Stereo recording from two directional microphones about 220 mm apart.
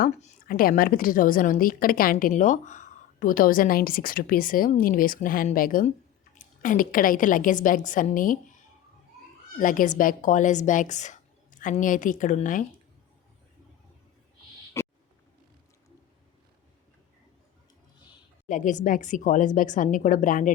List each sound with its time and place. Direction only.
0.0 s a woman's voice: 35° left (ahead or behind)
9.6 s a woman's voice: 35° left (ahead or behind)
14.8 s owl: 10° left (ahead or behind)
18.4 s a woman's voice: 35° left (ahead or behind)